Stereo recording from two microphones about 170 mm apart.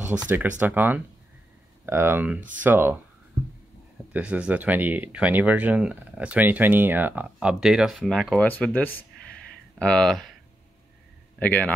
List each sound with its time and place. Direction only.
0.3 s speech: 10° right (ahead or behind)
4.1 s a man's voice: 5° right (ahead or behind)
11.3 s a man's voice: 10° left (ahead or behind)